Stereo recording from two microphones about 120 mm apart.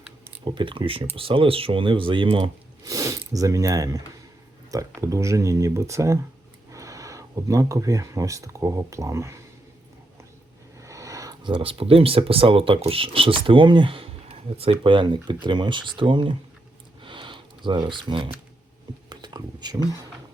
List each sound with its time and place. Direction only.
0.4 s speech: 45° right (ahead or behind)
2.8 s speech: 30° right (ahead or behind)
10.8 s a sound: 25° right (ahead or behind)
11.4 s speech: 45° right (ahead or behind)
17.0 s sniff: 45° right (ahead or behind)
19.0 s a sound: 35° right (ahead or behind)